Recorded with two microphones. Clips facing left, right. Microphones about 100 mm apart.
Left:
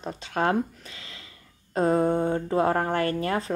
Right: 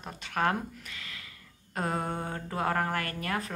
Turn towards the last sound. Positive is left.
turn(degrees=30)  # may be behind; listen again after turning